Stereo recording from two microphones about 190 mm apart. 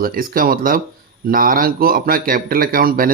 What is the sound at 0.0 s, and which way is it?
Speech, 50° right (ahead or behind).